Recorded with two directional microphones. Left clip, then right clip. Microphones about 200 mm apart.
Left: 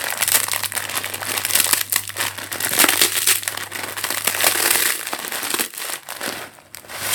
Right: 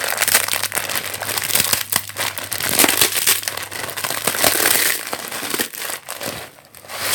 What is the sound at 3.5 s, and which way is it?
Crumpling, 5° right (ahead or behind).